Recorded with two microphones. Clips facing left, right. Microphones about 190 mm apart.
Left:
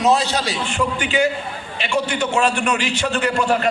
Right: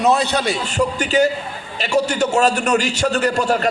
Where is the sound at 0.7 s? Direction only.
40° right (ahead or behind).